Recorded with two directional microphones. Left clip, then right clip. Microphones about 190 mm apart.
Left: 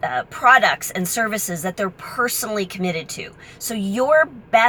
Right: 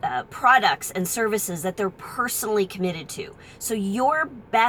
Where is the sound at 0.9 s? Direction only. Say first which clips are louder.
Left 2 dB; 15° left (ahead or behind).